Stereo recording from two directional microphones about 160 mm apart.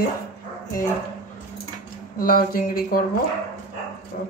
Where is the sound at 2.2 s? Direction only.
65° left (ahead or behind).